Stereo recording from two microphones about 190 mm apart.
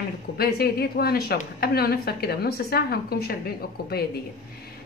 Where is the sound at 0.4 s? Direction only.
55° left (ahead or behind).